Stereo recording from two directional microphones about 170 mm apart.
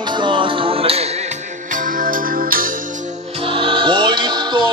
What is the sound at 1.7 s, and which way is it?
Music, 55° right (ahead or behind).